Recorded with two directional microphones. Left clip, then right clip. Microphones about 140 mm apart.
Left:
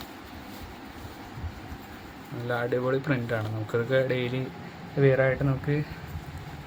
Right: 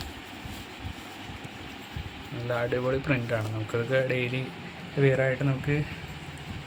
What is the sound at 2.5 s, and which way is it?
Speech, 20° left (ahead or behind).